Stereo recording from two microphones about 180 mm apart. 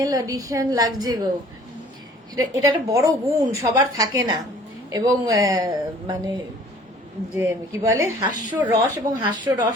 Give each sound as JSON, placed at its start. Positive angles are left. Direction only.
{"t": 0.0, "sound": "a woman's voice", "side_deg": -20}
{"t": 2.3, "sound": "a woman's voice", "side_deg": -20}
{"t": 7.3, "sound": "a woman's voice", "side_deg": -15}